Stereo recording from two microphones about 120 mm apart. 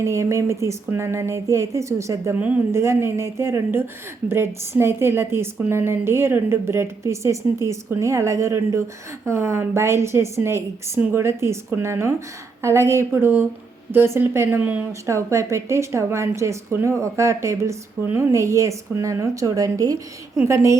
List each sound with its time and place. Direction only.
0.0 s a woman's voice: 25° right (ahead or behind)
15.0 s a woman's voice: 25° right (ahead or behind)